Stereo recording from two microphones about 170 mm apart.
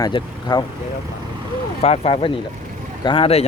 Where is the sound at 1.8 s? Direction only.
35° left (ahead or behind).